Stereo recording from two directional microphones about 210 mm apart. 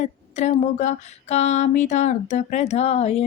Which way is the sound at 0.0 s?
35° left (ahead or behind).